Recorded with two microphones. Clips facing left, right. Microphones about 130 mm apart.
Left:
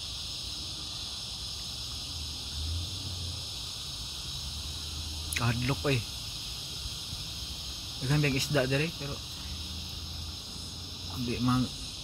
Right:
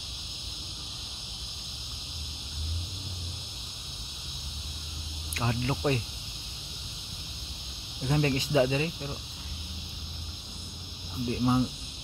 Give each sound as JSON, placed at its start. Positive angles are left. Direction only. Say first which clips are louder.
{"t": 5.3, "sound": "speech", "louder": "right 2 dB", "side_deg": -25}
{"t": 8.0, "sound": "speech", "louder": "right 2 dB", "side_deg": -20}
{"t": 11.2, "sound": "speech", "louder": "right 3 dB", "side_deg": -20}